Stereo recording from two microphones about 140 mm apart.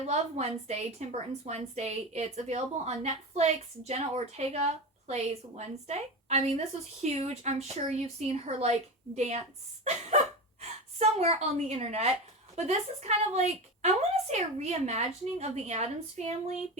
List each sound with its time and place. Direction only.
0.1 s a woman's voice: 50° right (ahead or behind)
10.6 s a woman's voice: 50° right (ahead or behind)